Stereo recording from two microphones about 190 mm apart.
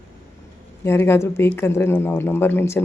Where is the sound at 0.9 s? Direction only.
15° left (ahead or behind).